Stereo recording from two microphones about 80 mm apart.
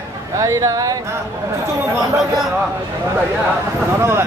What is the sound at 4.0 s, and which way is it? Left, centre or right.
Speech, right.